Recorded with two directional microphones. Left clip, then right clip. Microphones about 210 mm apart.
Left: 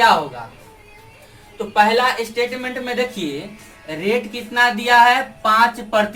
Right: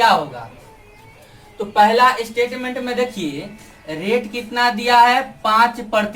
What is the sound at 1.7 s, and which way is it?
Speech, 15° right (ahead or behind).